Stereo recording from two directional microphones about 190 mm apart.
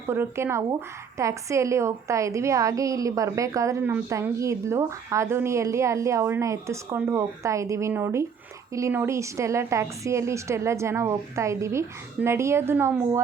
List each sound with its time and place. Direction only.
0.1 s a woman's voice: 10° right (ahead or behind)